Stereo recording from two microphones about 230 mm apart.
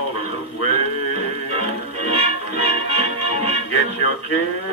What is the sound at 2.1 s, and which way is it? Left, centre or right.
Music, right.